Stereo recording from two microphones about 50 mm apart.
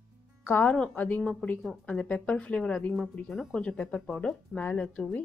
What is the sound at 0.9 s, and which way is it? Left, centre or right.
Speech, left.